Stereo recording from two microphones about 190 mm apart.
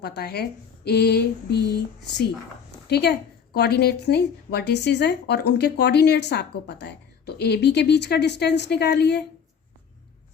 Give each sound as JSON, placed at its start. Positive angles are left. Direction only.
{"t": 0.0, "sound": "a woman's voice", "side_deg": 60}